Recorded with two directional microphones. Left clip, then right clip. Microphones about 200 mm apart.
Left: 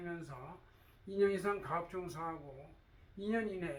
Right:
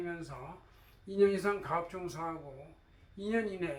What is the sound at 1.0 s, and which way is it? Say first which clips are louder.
Speech: right 5 dB; 10° left (ahead or behind).